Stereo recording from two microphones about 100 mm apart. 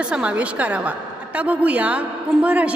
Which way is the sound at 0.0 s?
10° right (ahead or behind).